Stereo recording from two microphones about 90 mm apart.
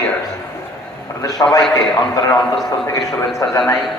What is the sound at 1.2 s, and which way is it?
A man's voice, 40° left (ahead or behind).